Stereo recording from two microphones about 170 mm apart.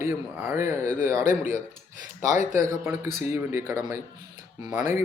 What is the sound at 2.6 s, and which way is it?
A man's voice, 15° right (ahead or behind).